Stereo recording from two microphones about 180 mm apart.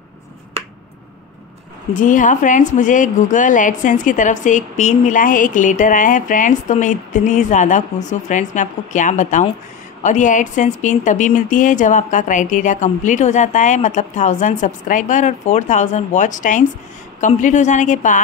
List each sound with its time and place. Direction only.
2.0 s a woman's voice: 45° left (ahead or behind)